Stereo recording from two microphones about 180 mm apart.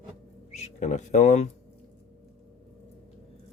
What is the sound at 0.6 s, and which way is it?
Speech, 40° left (ahead or behind).